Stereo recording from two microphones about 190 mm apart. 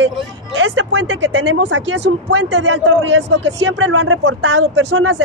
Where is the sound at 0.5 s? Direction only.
90° right.